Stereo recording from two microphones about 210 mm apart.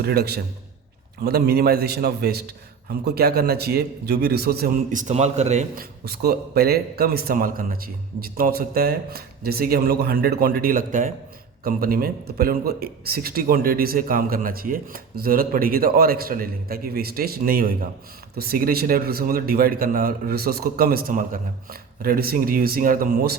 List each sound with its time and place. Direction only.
0.0 s a man's voice: 50° right (ahead or behind)